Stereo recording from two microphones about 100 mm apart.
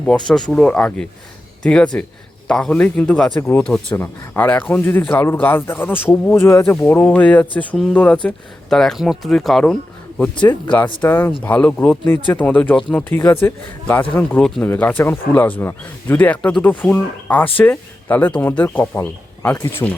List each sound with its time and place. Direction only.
0.0 s speech: 5° left (ahead or behind)
10.3 s speech: 50° left (ahead or behind)
11.0 s speech: 20° left (ahead or behind)